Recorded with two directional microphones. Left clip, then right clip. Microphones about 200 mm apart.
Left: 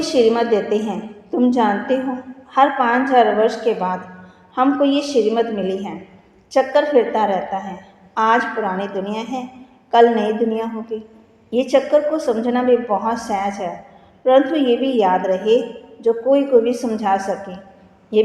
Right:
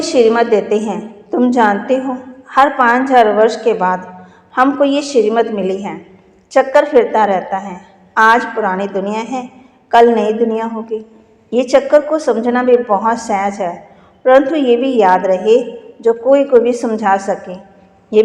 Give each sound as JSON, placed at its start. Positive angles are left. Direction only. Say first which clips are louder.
{"t": 0.0, "sound": "a woman's voice", "louder": "right 5 dB", "side_deg": -20}